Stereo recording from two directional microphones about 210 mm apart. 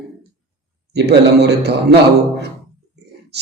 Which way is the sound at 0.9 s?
50° right (ahead or behind).